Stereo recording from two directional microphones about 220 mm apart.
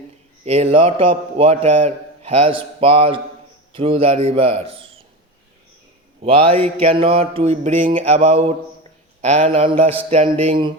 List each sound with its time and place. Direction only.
0.4 s a man's voice: 30° right (ahead or behind)
6.2 s a man's voice: 25° right (ahead or behind)